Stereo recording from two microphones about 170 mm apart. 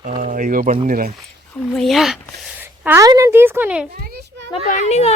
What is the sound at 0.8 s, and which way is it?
Speech, 55° right (ahead or behind).